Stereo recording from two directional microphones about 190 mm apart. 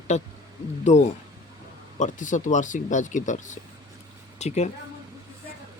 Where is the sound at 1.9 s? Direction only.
40° left (ahead or behind).